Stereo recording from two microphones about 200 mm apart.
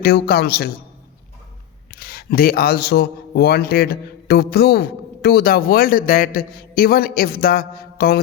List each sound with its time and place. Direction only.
0.0 s a man's voice: 50° left (ahead or behind)
1.9 s a man's voice: 50° left (ahead or behind)